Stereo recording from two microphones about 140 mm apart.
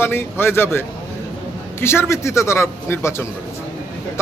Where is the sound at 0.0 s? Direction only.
15° left (ahead or behind).